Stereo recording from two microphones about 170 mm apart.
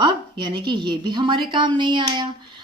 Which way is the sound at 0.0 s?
25° right (ahead or behind).